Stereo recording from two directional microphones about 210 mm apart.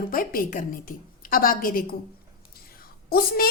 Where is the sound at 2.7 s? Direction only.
45° left (ahead or behind).